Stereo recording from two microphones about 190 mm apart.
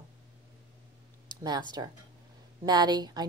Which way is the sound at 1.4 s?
20° right (ahead or behind).